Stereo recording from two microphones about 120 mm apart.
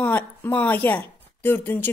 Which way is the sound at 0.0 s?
15° left (ahead or behind).